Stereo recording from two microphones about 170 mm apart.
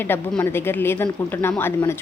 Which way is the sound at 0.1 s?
15° left (ahead or behind).